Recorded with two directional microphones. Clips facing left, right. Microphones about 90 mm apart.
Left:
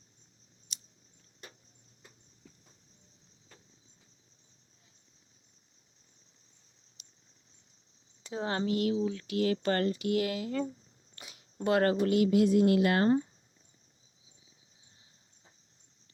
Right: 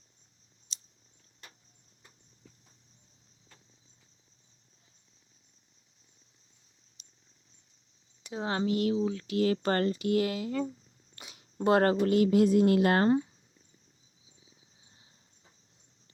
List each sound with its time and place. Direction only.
0.7 s a sound: 30° right (ahead or behind)
7.0 s cricket: 30° right (ahead or behind)
8.2 s speech: 20° right (ahead or behind); by 13.1 s 40° right (ahead or behind)